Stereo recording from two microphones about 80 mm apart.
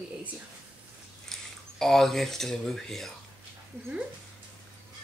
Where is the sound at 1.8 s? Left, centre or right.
Centre.